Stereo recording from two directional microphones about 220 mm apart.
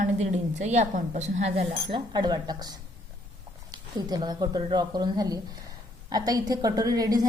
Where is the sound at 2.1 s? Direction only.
20° right (ahead or behind).